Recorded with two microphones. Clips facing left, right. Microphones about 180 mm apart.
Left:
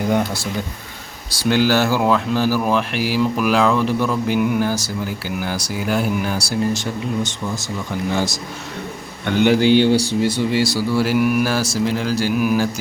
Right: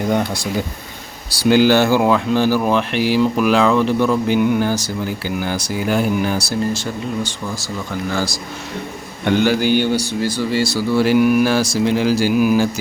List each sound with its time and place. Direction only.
0.1 s speech: 5° left (ahead or behind)
1.5 s speech: centre (ahead or behind)
6.7 s speech: 20° left (ahead or behind)
9.4 s speech: 25° left (ahead or behind); by 12.6 s centre (ahead or behind)